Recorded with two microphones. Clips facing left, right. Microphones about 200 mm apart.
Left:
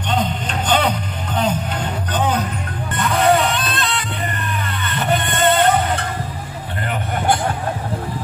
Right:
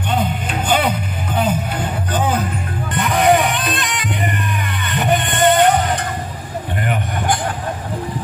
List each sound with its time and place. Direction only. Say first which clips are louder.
0.1 s music: even; 10° right (ahead or behind)